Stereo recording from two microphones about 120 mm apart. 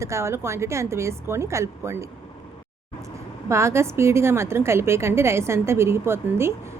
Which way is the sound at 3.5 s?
25° right (ahead or behind).